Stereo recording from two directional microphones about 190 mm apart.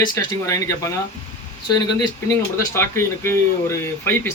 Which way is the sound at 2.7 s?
15° left (ahead or behind).